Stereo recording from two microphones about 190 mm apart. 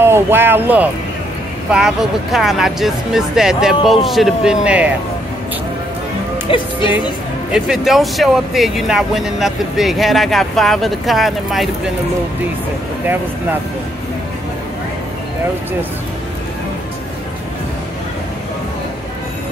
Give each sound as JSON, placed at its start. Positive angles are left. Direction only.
{"t": 0.0, "sound": "speech", "side_deg": -10}
{"t": 6.5, "sound": "speech", "side_deg": 30}
{"t": 7.5, "sound": "speech", "side_deg": 0}
{"t": 13.0, "sound": "speech", "side_deg": -10}